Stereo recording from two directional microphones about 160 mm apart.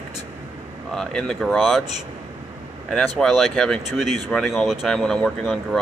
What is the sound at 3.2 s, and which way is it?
Speech, centre (ahead or behind).